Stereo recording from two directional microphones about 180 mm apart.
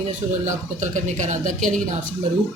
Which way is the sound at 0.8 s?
40° right (ahead or behind).